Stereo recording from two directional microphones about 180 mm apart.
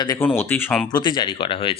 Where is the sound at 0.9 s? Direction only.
25° left (ahead or behind).